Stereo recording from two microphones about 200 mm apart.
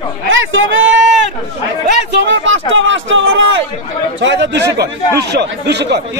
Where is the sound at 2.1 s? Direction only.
60° right (ahead or behind).